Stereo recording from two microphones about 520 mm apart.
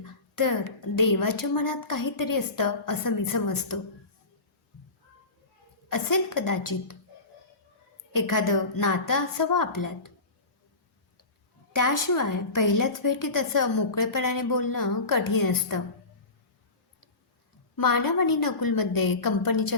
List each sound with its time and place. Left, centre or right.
0.9 s a woman's voice: left
5.9 s a woman's voice: left
8.1 s a woman's voice: left
11.7 s a woman's voice: left
17.7 s a woman's voice: left